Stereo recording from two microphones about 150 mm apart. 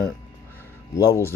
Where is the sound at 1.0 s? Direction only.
20° left (ahead or behind).